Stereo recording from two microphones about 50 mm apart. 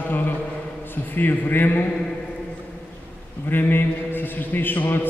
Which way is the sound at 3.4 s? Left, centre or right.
Left.